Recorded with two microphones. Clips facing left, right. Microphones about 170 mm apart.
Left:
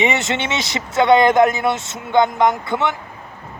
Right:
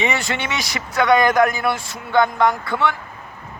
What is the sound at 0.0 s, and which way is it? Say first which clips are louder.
Speech: left 3 dB; 20° left (ahead or behind).